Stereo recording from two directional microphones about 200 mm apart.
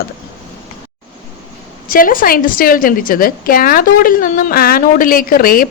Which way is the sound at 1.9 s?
45° left (ahead or behind).